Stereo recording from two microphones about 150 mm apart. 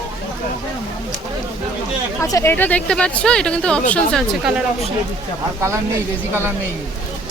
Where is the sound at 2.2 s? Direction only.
20° left (ahead or behind); by 4.6 s centre (ahead or behind).